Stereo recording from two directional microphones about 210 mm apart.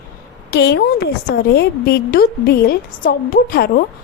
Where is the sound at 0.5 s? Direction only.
55° left (ahead or behind).